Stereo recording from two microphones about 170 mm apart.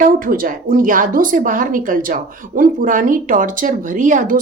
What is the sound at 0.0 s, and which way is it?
Speech, 55° right (ahead or behind).